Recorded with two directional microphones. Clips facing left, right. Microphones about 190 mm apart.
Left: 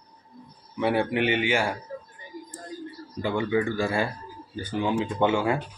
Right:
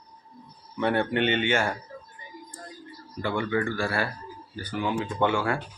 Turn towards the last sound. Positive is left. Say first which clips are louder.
# left 2 dB
turn(degrees=20)  # may be behind; listen again after turning